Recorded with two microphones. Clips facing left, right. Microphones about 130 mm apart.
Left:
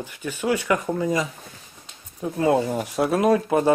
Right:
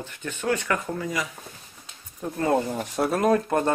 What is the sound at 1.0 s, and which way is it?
Speech, 25° left (ahead or behind).